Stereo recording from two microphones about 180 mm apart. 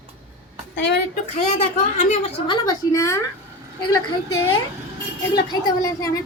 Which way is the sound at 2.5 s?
20° left (ahead or behind).